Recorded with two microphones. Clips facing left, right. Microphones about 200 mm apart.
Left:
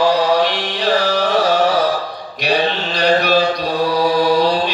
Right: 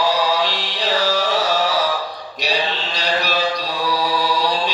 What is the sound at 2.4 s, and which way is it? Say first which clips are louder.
Mantra: left 6 dB; 55° left (ahead or behind).